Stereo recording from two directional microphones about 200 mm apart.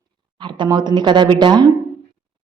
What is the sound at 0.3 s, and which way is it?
A woman's voice, 25° right (ahead or behind).